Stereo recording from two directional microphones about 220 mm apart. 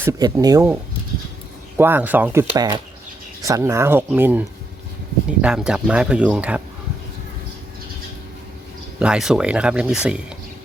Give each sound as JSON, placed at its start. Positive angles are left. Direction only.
{"t": 0.0, "sound": "speech", "side_deg": -15}
{"t": 1.8, "sound": "speech", "side_deg": -10}
{"t": 9.0, "sound": "speech", "side_deg": -5}